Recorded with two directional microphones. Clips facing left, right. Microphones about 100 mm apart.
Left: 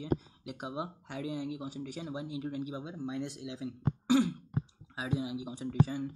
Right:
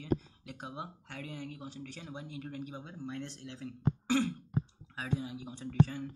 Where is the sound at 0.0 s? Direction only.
15° left (ahead or behind).